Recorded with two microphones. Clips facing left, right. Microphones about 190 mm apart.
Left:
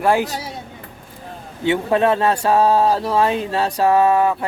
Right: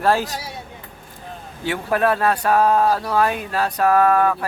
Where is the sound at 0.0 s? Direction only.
15° left (ahead or behind).